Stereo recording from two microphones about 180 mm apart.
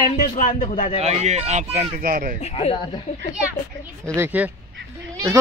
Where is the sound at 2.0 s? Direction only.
50° right (ahead or behind).